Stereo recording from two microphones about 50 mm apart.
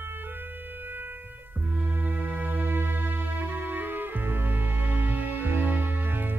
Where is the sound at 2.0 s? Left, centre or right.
Right.